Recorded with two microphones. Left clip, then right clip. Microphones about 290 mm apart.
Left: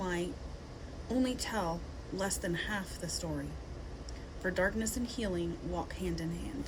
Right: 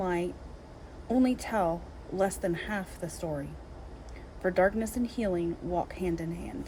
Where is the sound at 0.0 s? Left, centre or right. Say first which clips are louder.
Right 6 dB; centre.